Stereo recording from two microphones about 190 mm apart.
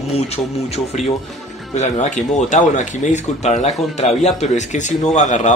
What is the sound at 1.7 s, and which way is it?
Speech, 35° left (ahead or behind).